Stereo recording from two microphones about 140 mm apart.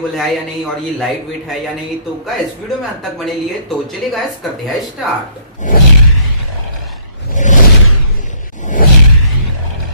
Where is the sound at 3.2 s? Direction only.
Centre (ahead or behind).